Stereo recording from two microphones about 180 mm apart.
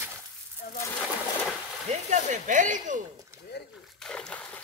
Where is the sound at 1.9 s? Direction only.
40° right (ahead or behind).